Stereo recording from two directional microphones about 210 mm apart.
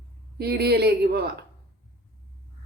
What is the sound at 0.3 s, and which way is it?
Speech, 50° right (ahead or behind).